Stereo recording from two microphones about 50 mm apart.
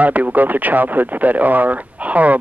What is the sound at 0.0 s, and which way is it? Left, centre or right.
Speech, right.